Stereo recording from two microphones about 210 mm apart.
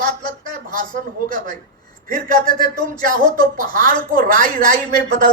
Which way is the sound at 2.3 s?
20° left (ahead or behind).